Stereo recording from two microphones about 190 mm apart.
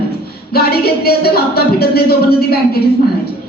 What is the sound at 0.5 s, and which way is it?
A woman's voice, 55° left (ahead or behind).